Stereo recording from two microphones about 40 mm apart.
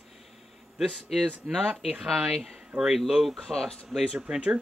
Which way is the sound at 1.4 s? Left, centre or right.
Right.